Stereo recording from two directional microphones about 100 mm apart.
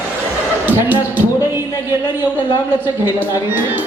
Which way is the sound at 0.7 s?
20° right (ahead or behind).